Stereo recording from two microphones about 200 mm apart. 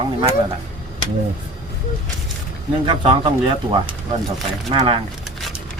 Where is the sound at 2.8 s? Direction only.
25° right (ahead or behind).